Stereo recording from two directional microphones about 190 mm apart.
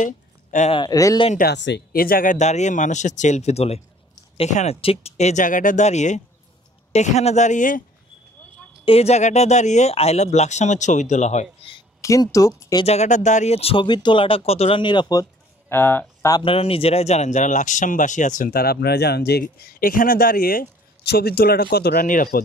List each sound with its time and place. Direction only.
0.0 s a sound: 40° left (ahead or behind)
0.7 s speech: 20° left (ahead or behind)
1.4 s speech: 65° left (ahead or behind); by 7.8 s 45° left (ahead or behind)
8.8 s speech: 30° left (ahead or behind)
12.0 s speech: 15° left (ahead or behind)
12.8 s speech: 35° left (ahead or behind)
15.7 s speech: 10° left (ahead or behind); by 22.4 s 45° left (ahead or behind)